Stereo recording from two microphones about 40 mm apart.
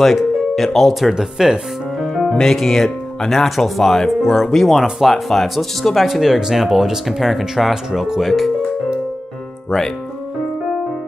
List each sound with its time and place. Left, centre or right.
0.0 s speech: centre
1.1 s speech: centre
2.0 s music: centre
2.3 s speech: centre
6.0 s speech: centre
9.7 s speech: centre